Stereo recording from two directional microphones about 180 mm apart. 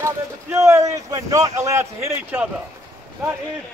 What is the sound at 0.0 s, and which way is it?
Speech, 15° right (ahead or behind).